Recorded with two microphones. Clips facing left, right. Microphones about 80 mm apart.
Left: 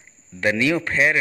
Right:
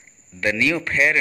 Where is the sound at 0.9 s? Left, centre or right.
Left.